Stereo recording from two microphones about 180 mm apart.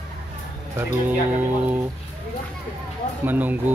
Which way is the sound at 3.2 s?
10° right (ahead or behind).